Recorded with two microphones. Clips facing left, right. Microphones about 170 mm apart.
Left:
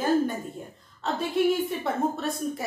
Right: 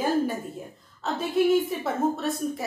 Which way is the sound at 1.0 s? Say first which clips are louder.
Right 1 dB; centre (ahead or behind).